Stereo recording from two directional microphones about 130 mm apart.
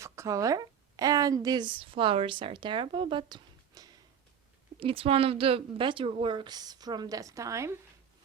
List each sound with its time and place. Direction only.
0.0 s a woman's voice: 25° right (ahead or behind)
4.8 s a woman's voice: 45° right (ahead or behind); by 7.8 s 20° right (ahead or behind)